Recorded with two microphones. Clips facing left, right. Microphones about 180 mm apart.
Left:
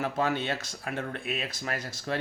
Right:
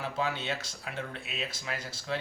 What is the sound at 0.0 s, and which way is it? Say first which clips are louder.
Speech: left 5 dB; 50° left (ahead or behind).